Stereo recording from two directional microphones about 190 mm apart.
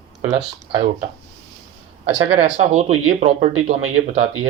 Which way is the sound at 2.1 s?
40° right (ahead or behind).